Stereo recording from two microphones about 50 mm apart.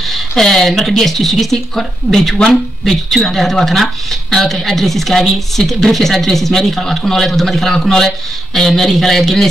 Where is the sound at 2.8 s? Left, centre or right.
Centre.